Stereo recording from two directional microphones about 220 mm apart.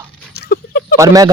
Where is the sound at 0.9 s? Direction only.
15° right (ahead or behind).